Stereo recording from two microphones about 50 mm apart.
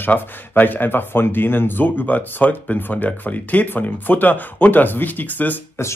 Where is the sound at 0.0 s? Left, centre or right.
Left.